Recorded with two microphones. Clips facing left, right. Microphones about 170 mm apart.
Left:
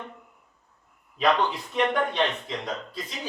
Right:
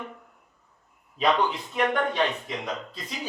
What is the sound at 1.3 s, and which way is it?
Speech, 5° right (ahead or behind).